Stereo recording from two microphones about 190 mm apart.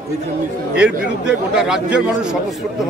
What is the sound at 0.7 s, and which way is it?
A man's voice, 5° right (ahead or behind).